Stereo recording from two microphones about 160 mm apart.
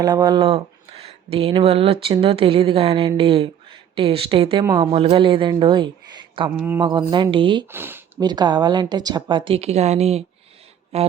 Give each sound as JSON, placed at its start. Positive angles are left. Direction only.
{"t": 0.0, "sound": "speech", "side_deg": -25}
{"t": 7.7, "sound": "a sound", "side_deg": -15}
{"t": 8.2, "sound": "speech", "side_deg": -25}